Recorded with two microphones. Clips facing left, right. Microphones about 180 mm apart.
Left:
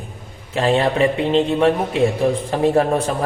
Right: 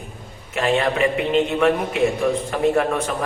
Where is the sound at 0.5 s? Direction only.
30° left (ahead or behind).